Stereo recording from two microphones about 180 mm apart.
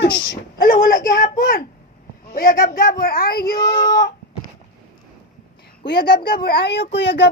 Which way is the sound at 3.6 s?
20° left (ahead or behind).